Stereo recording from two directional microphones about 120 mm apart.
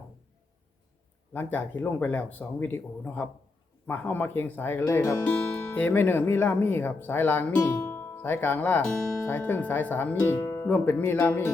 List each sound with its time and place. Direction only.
1.3 s speech: 15° left (ahead or behind)